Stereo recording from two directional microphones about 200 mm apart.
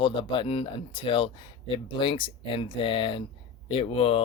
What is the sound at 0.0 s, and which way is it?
Speech, 25° left (ahead or behind).